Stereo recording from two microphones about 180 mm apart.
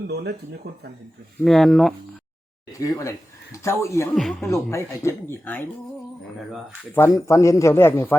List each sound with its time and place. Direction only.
0.1 s speech: 65° right (ahead or behind)
1.5 s speech: centre (ahead or behind)
2.8 s speech: 15° left (ahead or behind)
4.1 s speech: centre (ahead or behind)
4.5 s speech: 15° left (ahead or behind)
6.9 s speech: 15° left (ahead or behind)